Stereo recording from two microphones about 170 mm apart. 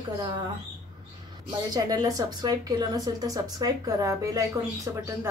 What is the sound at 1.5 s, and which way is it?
Speech, 20° right (ahead or behind).